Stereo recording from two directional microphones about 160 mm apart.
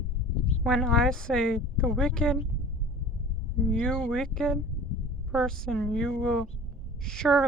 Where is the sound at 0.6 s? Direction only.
5° left (ahead or behind).